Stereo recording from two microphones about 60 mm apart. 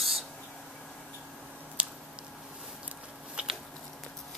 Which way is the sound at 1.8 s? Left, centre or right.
Right.